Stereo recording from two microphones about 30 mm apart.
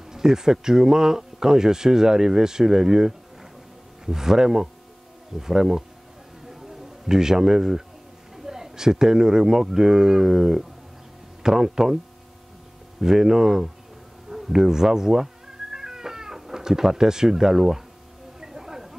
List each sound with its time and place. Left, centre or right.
0.0 s speech: centre
7.1 s speech: centre
13.0 s speech: centre
15.7 s cat: centre
16.6 s speech: centre
18.4 s a sound: centre